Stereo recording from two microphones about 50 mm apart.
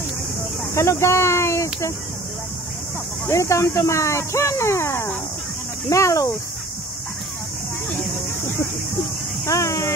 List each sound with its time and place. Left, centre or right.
0.7 s speech: left
3.3 s speech: left
5.9 s speech: left
9.5 s a sound: left